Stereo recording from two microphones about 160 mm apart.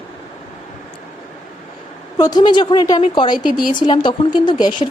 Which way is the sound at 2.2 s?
25° left (ahead or behind).